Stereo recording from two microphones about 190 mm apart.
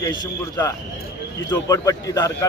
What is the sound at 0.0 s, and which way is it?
Speech, 20° left (ahead or behind).